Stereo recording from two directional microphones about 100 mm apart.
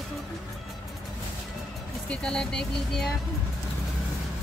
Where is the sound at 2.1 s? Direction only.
5° left (ahead or behind).